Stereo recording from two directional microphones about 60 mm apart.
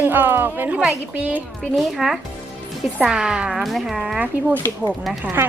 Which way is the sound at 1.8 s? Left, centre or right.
Centre.